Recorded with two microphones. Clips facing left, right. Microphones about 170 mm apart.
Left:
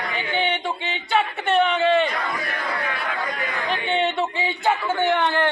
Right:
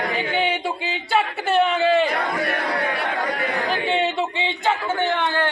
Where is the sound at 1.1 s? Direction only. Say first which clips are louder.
Even; 5° right (ahead or behind).